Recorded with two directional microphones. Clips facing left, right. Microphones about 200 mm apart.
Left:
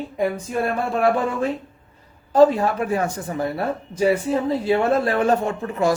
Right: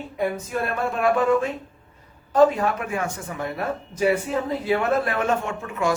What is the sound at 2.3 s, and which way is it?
Speech, 30° left (ahead or behind).